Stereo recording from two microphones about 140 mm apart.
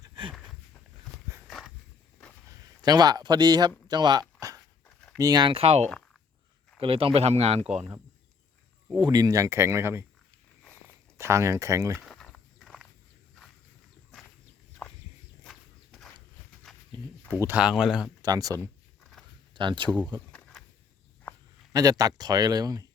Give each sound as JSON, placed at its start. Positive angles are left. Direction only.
{"t": 0.0, "sound": "a sound", "side_deg": -35}
{"t": 1.5, "sound": "walk", "side_deg": 0}
{"t": 2.8, "sound": "speech", "side_deg": -30}
{"t": 3.8, "sound": "dog", "side_deg": -30}
{"t": 4.9, "sound": "a sound", "side_deg": 5}
{"t": 5.1, "sound": "speech", "side_deg": -25}
{"t": 9.0, "sound": "speech", "side_deg": -30}
{"t": 12.0, "sound": "walk", "side_deg": 5}
{"t": 15.4, "sound": "horse", "side_deg": 0}
{"t": 17.4, "sound": "speech", "side_deg": -10}
{"t": 18.2, "sound": "speech", "side_deg": -25}
{"t": 19.5, "sound": "speech", "side_deg": -35}
{"t": 20.3, "sound": "a sound", "side_deg": 0}
{"t": 21.7, "sound": "speech", "side_deg": -25}